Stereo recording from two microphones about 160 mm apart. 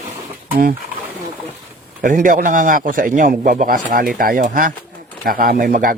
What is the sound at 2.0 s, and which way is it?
A man's voice, 60° right (ahead or behind).